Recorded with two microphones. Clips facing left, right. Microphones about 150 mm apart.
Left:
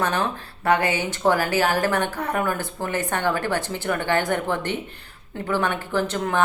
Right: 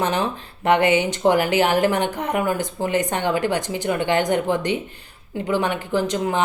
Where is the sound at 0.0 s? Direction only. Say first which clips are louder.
Right 2 dB; 20° right (ahead or behind).